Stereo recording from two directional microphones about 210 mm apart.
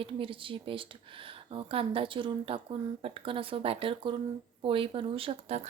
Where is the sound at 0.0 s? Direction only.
25° right (ahead or behind).